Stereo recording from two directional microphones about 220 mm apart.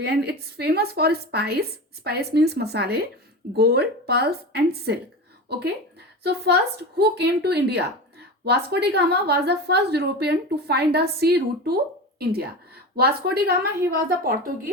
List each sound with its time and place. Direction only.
0.0 s a woman's voice: 50° right (ahead or behind)